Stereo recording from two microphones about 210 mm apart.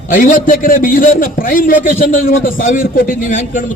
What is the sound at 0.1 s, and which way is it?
A man's voice, 40° left (ahead or behind).